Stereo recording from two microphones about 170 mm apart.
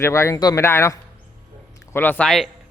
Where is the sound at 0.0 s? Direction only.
15° left (ahead or behind).